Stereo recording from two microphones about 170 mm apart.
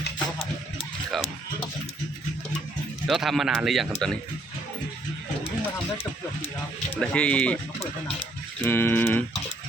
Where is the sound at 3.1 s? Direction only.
Centre (ahead or behind).